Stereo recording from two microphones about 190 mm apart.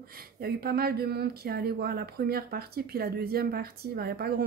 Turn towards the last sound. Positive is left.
turn(degrees=-55)  # may be behind; listen again after turning